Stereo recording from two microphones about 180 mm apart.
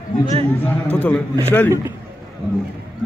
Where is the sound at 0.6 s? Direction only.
10° left (ahead or behind).